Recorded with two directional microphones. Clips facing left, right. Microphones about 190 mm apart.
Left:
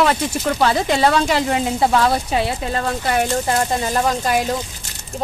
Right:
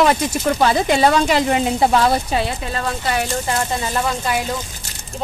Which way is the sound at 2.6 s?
50° left (ahead or behind).